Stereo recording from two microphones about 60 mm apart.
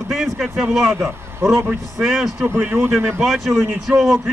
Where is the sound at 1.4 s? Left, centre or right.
Right.